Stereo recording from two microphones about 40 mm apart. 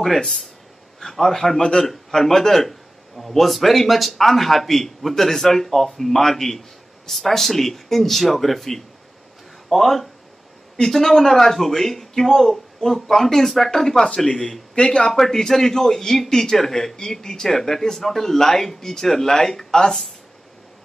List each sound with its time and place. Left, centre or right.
0.0 s a man's voice: centre
1.6 s a man's voice: centre
1.9 s a man's voice: centre